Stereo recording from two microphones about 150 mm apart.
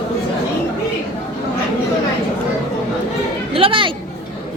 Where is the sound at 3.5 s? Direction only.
35° right (ahead or behind).